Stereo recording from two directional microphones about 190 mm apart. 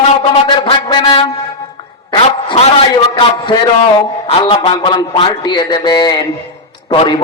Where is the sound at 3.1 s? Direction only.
25° left (ahead or behind).